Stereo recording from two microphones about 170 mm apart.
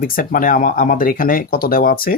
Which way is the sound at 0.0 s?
55° left (ahead or behind).